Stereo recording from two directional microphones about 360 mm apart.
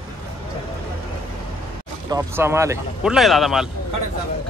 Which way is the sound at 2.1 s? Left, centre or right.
Centre.